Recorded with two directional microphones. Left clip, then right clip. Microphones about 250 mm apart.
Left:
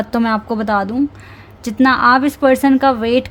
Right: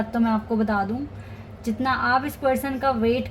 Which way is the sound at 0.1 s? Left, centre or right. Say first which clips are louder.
Left 7 dB; left.